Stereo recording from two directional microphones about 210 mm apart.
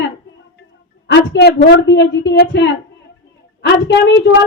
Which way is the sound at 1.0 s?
55° left (ahead or behind).